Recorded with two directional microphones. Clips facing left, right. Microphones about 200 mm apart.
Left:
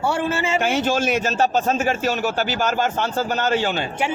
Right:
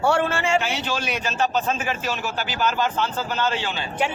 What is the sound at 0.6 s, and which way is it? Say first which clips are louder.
A man's voice: left 6 dB; 50° left (ahead or behind).